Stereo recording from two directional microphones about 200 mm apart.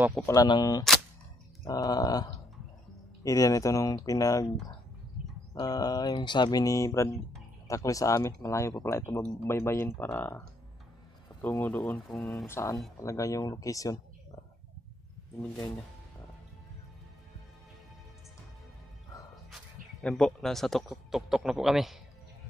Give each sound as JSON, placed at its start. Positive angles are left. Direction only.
{"t": 0.3, "sound": "speech", "side_deg": 20}
{"t": 5.5, "sound": "speech", "side_deg": 20}
{"t": 11.5, "sound": "speech", "side_deg": 10}
{"t": 12.5, "sound": "speech", "side_deg": 15}
{"t": 19.5, "sound": "speech", "side_deg": 5}